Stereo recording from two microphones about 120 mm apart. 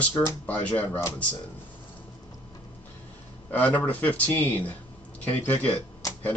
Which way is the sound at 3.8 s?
15° left (ahead or behind).